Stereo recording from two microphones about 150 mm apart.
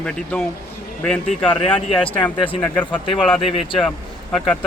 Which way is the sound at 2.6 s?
10° left (ahead or behind).